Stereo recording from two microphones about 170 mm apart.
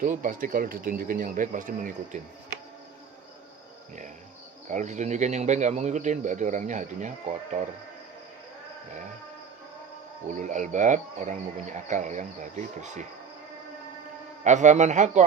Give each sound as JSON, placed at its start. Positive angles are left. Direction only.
{"t": 0.0, "sound": "speech", "side_deg": -55}
{"t": 4.7, "sound": "speech", "side_deg": -45}
{"t": 10.2, "sound": "speech", "side_deg": -45}
{"t": 14.4, "sound": "speech", "side_deg": -45}